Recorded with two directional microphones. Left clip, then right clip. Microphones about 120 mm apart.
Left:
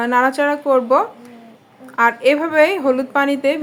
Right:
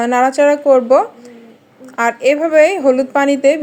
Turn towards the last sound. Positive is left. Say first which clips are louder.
# right 5 dB
turn(degrees=-25)  # may be behind; listen again after turning